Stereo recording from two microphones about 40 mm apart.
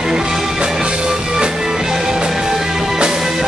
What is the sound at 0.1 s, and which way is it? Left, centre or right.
Music, centre.